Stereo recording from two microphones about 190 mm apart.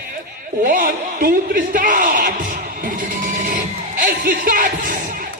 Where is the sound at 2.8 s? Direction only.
45° right (ahead or behind).